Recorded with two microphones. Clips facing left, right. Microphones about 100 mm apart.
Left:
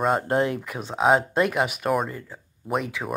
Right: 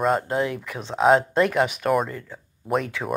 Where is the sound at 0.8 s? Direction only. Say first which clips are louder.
Right 2 dB; 5° left (ahead or behind).